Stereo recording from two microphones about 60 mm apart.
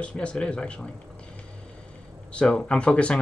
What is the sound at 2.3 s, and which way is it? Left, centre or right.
Speech, centre.